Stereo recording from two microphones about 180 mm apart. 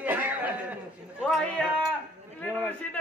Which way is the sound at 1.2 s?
5° left (ahead or behind).